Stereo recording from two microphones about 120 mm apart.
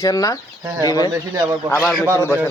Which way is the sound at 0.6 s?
35° right (ahead or behind).